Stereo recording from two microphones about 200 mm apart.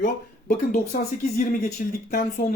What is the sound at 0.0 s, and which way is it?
Speech, 40° left (ahead or behind).